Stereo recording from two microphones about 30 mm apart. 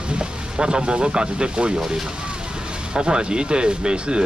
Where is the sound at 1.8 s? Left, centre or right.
Centre.